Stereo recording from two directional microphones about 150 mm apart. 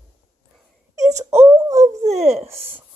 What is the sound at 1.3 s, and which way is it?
Wail, 20° right (ahead or behind).